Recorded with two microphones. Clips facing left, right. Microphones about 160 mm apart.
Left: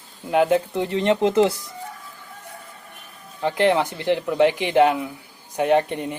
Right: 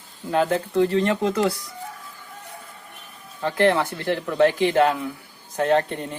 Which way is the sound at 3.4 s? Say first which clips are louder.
Left 1 dB; 15° left (ahead or behind).